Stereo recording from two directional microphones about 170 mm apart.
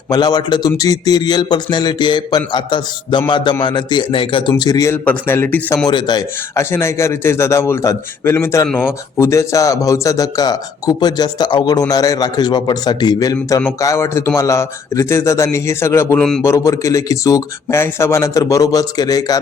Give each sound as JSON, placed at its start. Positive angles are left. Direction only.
{"t": 0.1, "sound": "a man's voice", "side_deg": 25}
{"t": 5.8, "sound": "a man's voice", "side_deg": 25}